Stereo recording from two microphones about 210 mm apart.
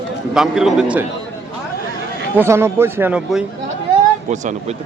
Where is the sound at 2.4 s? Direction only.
10° right (ahead or behind).